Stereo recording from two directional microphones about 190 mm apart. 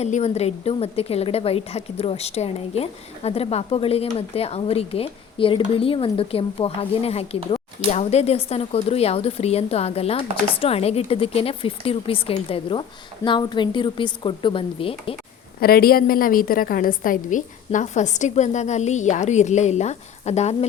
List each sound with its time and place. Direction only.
0.0 s a woman's voice: 35° left (ahead or behind)
15.6 s a woman's voice: 50° left (ahead or behind); by 20.7 s 35° left (ahead or behind)